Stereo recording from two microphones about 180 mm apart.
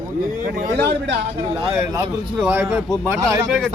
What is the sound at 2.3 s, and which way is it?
Speech, 10° right (ahead or behind).